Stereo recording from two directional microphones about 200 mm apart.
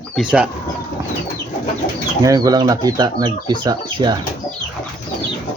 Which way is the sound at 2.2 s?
20° right (ahead or behind).